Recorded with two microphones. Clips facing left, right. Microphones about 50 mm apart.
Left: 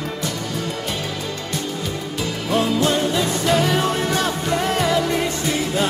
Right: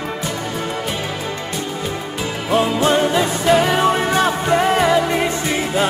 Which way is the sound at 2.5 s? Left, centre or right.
Right.